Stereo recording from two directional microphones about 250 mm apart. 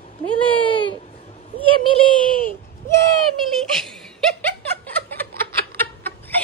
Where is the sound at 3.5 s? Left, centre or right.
Centre.